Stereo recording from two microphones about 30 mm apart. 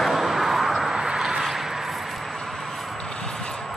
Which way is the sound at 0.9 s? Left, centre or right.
Centre.